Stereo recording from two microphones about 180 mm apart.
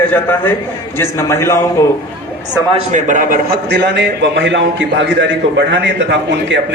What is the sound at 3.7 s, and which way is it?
A man's voice, 70° right (ahead or behind).